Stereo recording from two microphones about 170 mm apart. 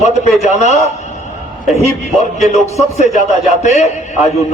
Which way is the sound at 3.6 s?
40° left (ahead or behind).